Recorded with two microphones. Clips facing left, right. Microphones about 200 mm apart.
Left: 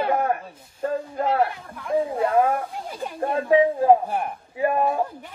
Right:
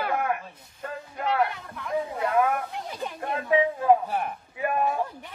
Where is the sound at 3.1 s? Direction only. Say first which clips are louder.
Left 6 dB; 30° left (ahead or behind).